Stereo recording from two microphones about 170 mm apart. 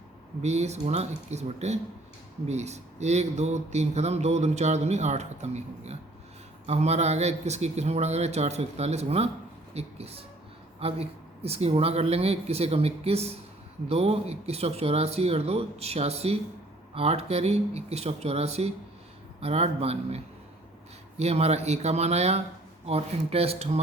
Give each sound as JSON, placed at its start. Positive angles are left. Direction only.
{"t": 0.4, "sound": "speech", "side_deg": -40}